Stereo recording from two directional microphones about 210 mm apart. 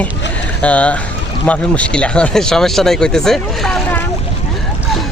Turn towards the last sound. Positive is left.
turn(degrees=5)  # may be behind; listen again after turning